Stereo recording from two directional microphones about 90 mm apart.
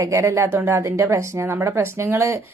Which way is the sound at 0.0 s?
35° right (ahead or behind).